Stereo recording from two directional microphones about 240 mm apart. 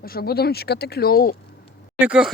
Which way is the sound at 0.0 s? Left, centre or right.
Left.